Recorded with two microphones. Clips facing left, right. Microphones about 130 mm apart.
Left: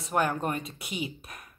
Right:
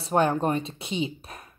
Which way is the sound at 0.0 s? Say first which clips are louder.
Right 5 dB; 30° right (ahead or behind).